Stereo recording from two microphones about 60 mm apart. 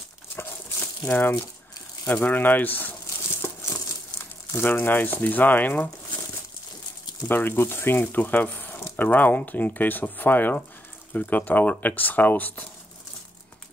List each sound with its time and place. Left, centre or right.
0.4 s crumpling: left
2.1 s a sound: left
4.5 s speech: left
7.2 s speech: left